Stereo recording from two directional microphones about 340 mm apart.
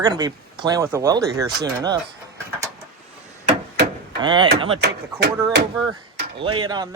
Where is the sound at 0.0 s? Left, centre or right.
Centre.